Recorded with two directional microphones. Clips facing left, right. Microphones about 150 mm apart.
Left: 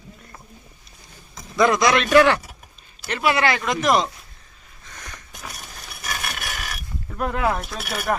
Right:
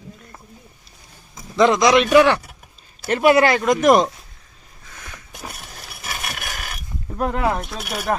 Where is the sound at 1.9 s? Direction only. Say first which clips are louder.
Right 2 dB; 5° right (ahead or behind).